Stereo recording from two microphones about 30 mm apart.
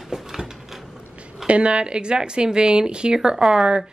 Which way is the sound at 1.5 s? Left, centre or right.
Right.